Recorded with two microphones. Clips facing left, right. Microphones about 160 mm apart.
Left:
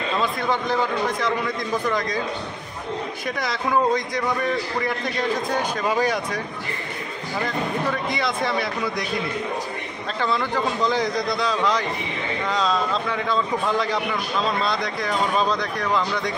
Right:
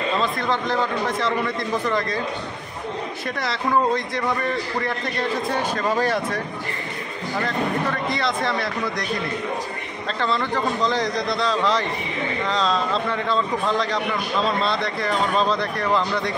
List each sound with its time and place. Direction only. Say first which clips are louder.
0.2 s a man's voice: even; 5° left (ahead or behind)
3.3 s a man's voice: right 1 dB; centre (ahead or behind)
7.4 s a man's voice: right 1 dB; centre (ahead or behind)
10.2 s a man's voice: even; 5° left (ahead or behind)